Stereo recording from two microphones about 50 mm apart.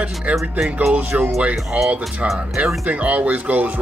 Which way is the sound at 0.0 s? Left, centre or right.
Right.